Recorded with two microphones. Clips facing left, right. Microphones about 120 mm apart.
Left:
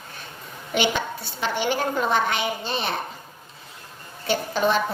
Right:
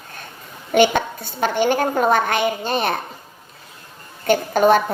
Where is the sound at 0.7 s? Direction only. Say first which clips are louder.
Right 8 dB; 50° right (ahead or behind).